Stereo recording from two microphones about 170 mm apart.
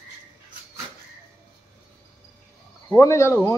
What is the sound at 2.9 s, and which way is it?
Speech, 15° left (ahead or behind).